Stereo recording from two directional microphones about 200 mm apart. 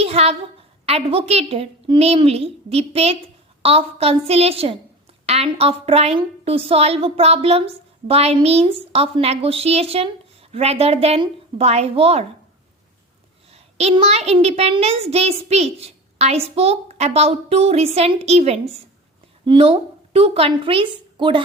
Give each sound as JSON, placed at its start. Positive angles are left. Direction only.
{"t": 0.0, "sound": "a sound", "side_deg": -30}
{"t": 0.9, "sound": "a woman's voice", "side_deg": -30}
{"t": 13.5, "sound": "a child's voice", "side_deg": -30}